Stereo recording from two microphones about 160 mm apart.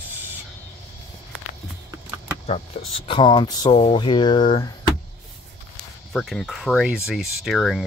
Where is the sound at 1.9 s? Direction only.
20° right (ahead or behind).